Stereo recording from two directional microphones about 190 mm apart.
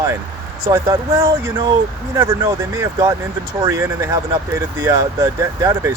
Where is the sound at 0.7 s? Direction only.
20° right (ahead or behind).